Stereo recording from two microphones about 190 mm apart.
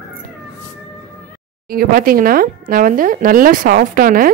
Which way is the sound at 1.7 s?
50° right (ahead or behind).